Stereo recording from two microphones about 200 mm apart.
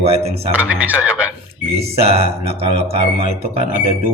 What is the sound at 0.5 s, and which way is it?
Speech, 5° right (ahead or behind).